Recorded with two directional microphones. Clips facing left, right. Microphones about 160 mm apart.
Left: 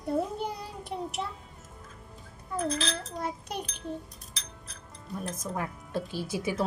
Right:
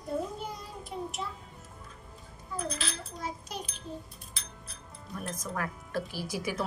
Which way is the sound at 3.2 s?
60° left (ahead or behind).